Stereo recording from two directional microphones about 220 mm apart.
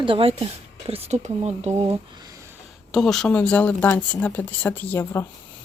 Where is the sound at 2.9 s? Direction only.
Centre (ahead or behind).